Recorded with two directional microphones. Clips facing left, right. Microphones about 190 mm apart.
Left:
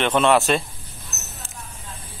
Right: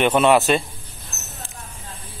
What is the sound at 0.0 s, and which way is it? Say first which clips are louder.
Speech: right 2 dB; 10° right (ahead or behind).